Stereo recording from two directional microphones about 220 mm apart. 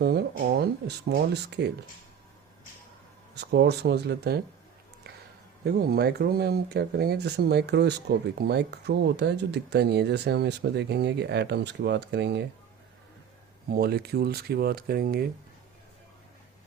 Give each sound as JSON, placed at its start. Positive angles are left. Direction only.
{"t": 0.0, "sound": "speech", "side_deg": -45}
{"t": 3.3, "sound": "speech", "side_deg": -50}
{"t": 5.6, "sound": "speech", "side_deg": -45}
{"t": 13.7, "sound": "speech", "side_deg": -45}